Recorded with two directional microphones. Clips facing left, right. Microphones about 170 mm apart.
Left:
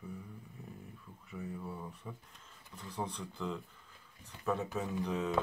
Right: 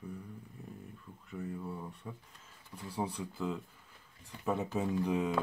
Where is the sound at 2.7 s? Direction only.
10° right (ahead or behind).